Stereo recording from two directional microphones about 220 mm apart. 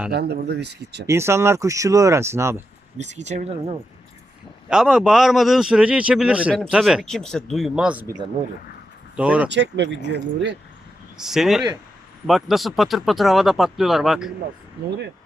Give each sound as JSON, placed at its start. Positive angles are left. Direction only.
{"t": 0.1, "sound": "speech", "side_deg": -50}
{"t": 1.0, "sound": "speech", "side_deg": -10}
{"t": 3.0, "sound": "speech", "side_deg": -30}
{"t": 4.7, "sound": "a man's voice", "side_deg": -5}
{"t": 9.1, "sound": "a man's voice", "side_deg": -5}
{"t": 9.5, "sound": "speech", "side_deg": -50}
{"t": 11.2, "sound": "a man's voice", "side_deg": 0}